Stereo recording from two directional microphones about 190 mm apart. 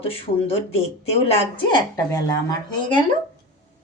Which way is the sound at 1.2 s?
25° left (ahead or behind).